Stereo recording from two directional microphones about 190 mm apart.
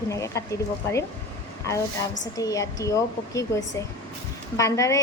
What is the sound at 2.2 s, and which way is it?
Speech, 20° left (ahead or behind).